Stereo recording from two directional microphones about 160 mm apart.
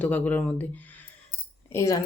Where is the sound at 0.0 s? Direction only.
10° left (ahead or behind).